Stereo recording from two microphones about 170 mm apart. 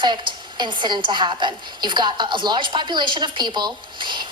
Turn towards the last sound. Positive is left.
turn(degrees=-25)  # may be behind; listen again after turning